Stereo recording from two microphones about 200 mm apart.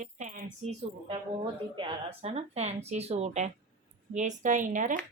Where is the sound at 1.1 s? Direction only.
25° right (ahead or behind).